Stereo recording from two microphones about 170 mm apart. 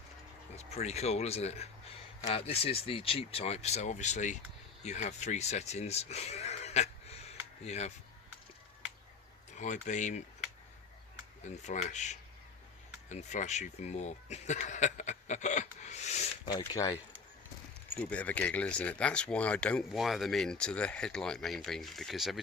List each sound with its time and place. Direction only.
0.5 s speech: 40° left (ahead or behind)
9.6 s speech: 45° left (ahead or behind)
11.5 s speech: 45° left (ahead or behind)
16.5 s speech: 20° left (ahead or behind)
18.0 s speech: 10° left (ahead or behind)